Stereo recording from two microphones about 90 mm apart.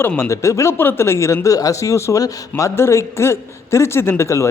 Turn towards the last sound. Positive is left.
turn(degrees=30)  # may be behind; listen again after turning